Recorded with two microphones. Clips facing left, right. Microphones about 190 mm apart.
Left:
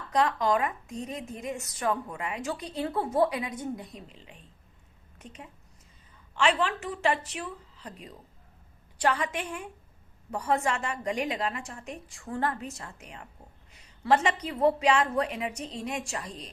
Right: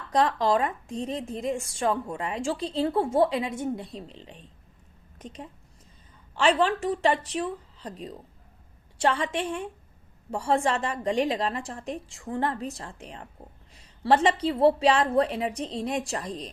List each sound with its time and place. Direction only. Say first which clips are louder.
0.1 s a woman's voice: right 2 dB; 35° right (ahead or behind)